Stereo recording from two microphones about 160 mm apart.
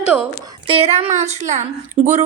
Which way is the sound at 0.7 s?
40° right (ahead or behind).